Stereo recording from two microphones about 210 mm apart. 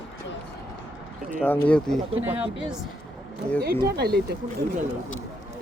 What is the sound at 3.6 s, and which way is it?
Speech, 50° right (ahead or behind).